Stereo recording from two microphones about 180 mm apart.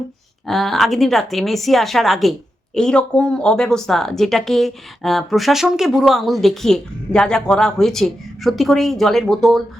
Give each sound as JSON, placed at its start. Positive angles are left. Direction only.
{"t": 0.4, "sound": "speech", "side_deg": 0}